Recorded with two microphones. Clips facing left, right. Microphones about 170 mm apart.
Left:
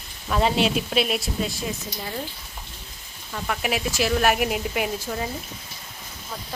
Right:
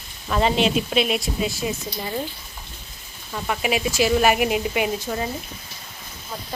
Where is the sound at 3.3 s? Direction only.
5° right (ahead or behind).